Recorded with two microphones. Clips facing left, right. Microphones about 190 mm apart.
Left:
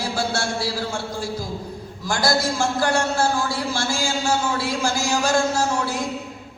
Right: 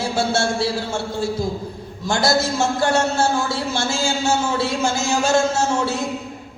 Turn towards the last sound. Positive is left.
turn(degrees=-25)  # may be behind; listen again after turning